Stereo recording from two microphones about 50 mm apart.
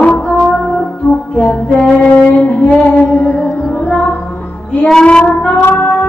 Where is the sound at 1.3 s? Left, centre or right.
Left.